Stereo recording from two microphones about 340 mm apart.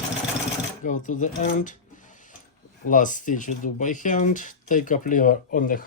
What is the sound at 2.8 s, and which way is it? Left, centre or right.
Speech, left.